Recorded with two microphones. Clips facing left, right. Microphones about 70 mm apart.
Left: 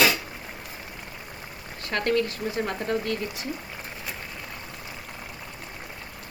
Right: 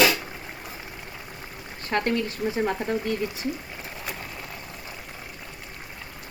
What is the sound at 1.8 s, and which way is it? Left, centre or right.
Speech, right.